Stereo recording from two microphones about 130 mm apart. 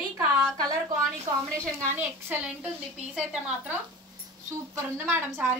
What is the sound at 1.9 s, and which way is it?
A woman's voice, 15° right (ahead or behind).